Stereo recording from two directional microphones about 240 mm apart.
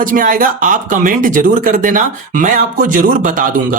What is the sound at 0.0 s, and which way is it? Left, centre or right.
Speech, right.